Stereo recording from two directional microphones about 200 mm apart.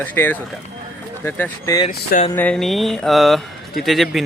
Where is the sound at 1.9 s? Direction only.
40° left (ahead or behind).